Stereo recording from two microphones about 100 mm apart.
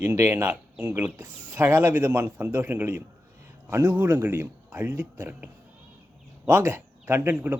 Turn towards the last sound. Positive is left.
turn(degrees=-20)  # may be behind; listen again after turning